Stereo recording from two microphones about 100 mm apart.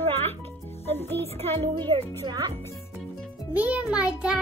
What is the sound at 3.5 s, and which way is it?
Speech, 15° right (ahead or behind).